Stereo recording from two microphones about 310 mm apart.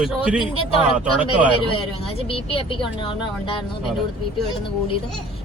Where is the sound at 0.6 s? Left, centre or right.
Centre.